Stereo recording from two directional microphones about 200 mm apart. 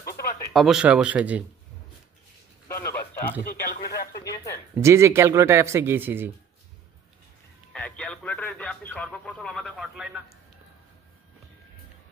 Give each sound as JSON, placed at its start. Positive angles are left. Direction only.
{"t": 0.5, "sound": "speech", "side_deg": 0}
{"t": 2.7, "sound": "a sound", "side_deg": 15}
{"t": 3.6, "sound": "speech", "side_deg": 45}
{"t": 4.7, "sound": "speech", "side_deg": -15}
{"t": 7.7, "sound": "speech", "side_deg": 5}